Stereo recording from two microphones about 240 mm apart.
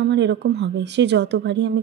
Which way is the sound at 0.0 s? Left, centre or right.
Right.